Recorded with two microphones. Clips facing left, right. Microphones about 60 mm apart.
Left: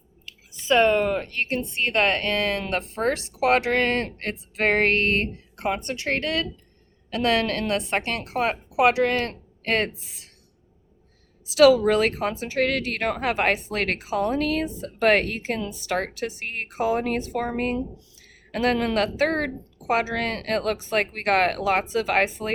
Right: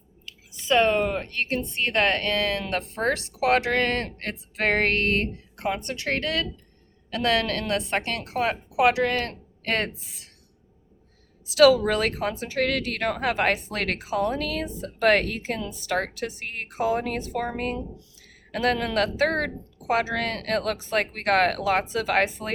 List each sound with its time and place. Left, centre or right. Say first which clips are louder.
1.4 s speech: left 1 dB; left
11.7 s speech: left 3 dB; left
18.5 s speech: left 1 dB; left